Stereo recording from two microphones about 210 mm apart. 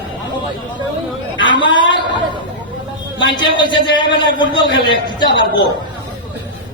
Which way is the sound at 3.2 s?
20° left (ahead or behind).